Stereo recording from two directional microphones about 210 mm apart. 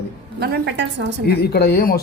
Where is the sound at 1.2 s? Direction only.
50° left (ahead or behind).